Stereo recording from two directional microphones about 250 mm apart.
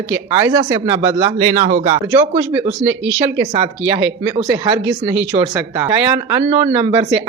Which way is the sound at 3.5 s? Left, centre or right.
Centre.